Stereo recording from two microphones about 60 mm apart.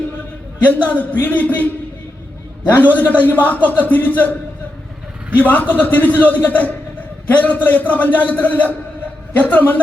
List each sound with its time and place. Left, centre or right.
0.7 s speech: left
1.1 s a sound: left
2.9 s speech: left
5.4 s speech: left